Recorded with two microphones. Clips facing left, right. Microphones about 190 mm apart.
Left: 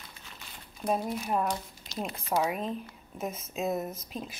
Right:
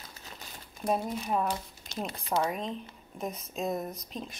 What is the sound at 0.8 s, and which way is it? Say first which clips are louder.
Speech: even; 5° left (ahead or behind).